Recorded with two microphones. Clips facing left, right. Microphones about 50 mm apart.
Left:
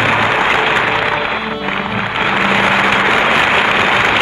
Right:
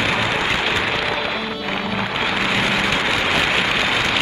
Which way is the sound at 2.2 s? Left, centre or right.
Left.